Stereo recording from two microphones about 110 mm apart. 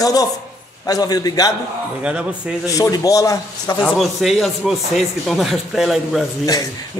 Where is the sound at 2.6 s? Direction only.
35° left (ahead or behind).